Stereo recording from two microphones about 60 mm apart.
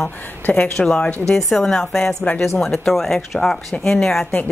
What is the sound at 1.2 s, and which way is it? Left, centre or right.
A woman's voice, centre.